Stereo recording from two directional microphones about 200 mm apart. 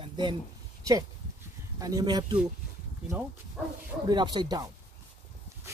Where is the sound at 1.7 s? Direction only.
20° right (ahead or behind).